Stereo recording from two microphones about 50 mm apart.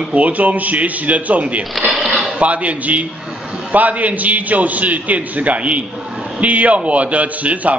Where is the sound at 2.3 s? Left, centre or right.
Right.